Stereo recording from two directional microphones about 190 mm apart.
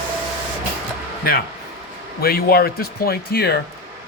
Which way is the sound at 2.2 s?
50° left (ahead or behind).